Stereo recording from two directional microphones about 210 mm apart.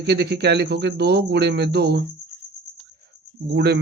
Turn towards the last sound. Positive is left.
turn(degrees=-50)  # may be behind; listen again after turning